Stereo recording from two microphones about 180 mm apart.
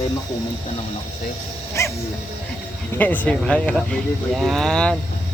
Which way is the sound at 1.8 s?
15° left (ahead or behind).